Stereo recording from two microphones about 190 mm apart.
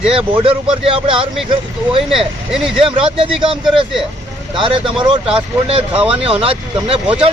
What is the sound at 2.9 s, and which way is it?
Speech, 30° right (ahead or behind).